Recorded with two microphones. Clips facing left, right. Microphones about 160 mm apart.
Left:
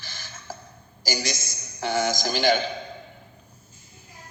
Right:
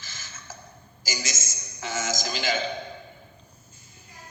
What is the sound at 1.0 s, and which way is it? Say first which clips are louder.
A man's voice: left 5 dB; 65° left (ahead or behind).